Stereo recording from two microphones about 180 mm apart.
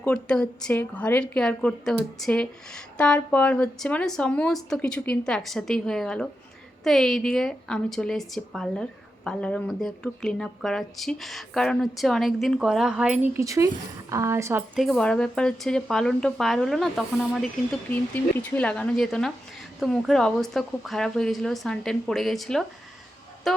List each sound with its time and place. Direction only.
0.0 s a woman's voice: 5° left (ahead or behind); by 14.6 s 15° right (ahead or behind)
14.8 s a woman's voice: centre (ahead or behind)
23.5 s music: centre (ahead or behind)